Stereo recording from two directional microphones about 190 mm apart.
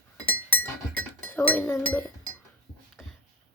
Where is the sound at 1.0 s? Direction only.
10° left (ahead or behind).